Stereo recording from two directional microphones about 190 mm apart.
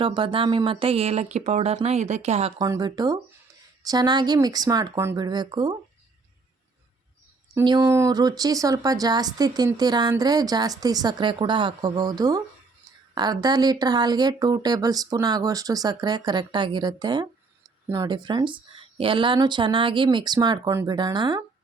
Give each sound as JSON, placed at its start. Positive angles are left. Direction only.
{"t": 0.0, "sound": "speech", "side_deg": -25}
{"t": 2.6, "sound": "speech", "side_deg": -20}
{"t": 7.6, "sound": "speech", "side_deg": -20}